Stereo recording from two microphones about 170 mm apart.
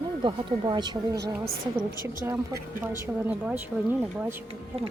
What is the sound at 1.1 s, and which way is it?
Speech, 75° right (ahead or behind).